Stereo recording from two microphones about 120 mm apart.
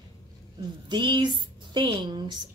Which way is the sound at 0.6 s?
40° right (ahead or behind).